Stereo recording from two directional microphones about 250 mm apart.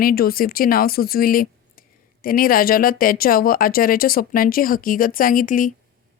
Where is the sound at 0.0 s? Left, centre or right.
Left.